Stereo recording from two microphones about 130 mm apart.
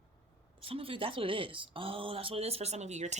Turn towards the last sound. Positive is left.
turn(degrees=-60)  # may be behind; listen again after turning